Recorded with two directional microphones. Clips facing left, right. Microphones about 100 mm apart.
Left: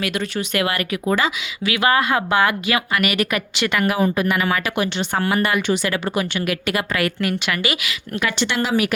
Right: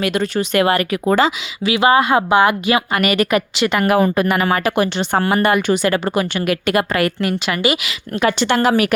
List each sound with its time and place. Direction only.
0.0 s a woman's voice: 35° right (ahead or behind); by 2.8 s 20° right (ahead or behind)
2.9 s a woman's voice: 35° right (ahead or behind)
3.8 s speech: 55° right (ahead or behind)
7.2 s a woman's voice: 30° right (ahead or behind); by 9.0 s 55° right (ahead or behind)